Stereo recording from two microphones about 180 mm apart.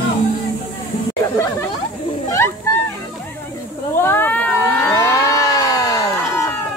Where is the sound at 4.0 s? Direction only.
10° left (ahead or behind).